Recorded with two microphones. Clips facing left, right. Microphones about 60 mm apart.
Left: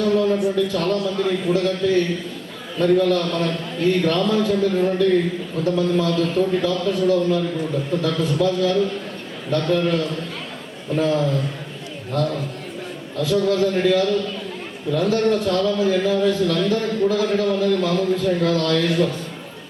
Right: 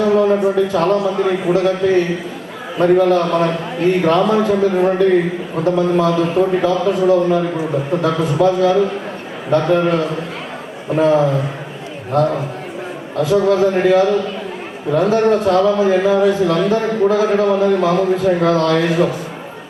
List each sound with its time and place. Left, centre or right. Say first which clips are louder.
0.0 s a man's voice: right 5 dB; right
6.7 s a man's voice: right 5 dB; centre